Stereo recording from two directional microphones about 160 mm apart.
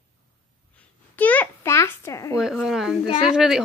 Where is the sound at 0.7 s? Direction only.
10° left (ahead or behind).